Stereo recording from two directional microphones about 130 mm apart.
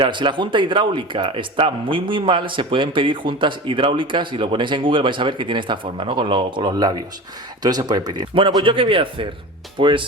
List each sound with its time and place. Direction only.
0.0 s a man's voice: 35° right (ahead or behind)
8.4 s a man's voice: 40° right (ahead or behind)